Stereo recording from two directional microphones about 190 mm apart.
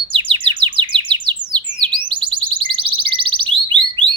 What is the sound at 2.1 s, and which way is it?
Alarm, 25° right (ahead or behind).